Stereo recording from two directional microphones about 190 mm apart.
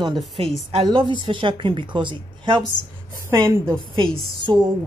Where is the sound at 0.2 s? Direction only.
Centre (ahead or behind).